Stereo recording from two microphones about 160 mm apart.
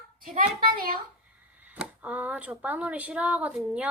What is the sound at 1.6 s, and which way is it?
Speech, 10° right (ahead or behind).